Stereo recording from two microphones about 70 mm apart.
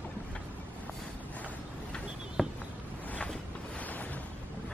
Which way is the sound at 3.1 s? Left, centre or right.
Centre.